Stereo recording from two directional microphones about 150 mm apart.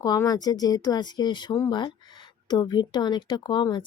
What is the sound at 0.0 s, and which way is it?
A woman's voice, 25° left (ahead or behind).